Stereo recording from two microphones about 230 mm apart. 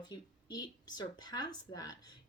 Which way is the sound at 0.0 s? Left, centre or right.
Centre.